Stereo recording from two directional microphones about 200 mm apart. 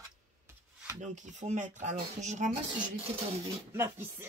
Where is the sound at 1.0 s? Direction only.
40° right (ahead or behind).